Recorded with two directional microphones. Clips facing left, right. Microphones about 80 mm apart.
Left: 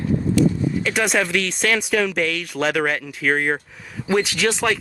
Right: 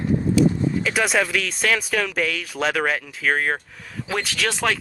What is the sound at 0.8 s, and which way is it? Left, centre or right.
Speech, centre.